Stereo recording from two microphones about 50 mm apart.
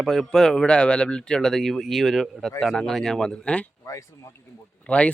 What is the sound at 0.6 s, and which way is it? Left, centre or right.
Speech, left.